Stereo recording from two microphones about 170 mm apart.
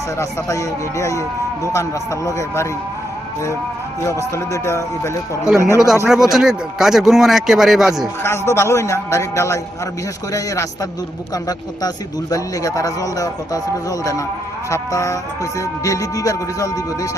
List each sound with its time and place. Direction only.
0.2 s speech: 20° left (ahead or behind)
4.0 s speech: 20° left (ahead or behind)
6.1 s speech: centre (ahead or behind)
8.2 s speech: 15° left (ahead or behind)
12.3 s speech: 20° left (ahead or behind)